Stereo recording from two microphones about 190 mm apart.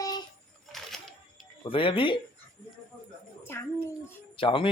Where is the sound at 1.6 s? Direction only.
25° left (ahead or behind).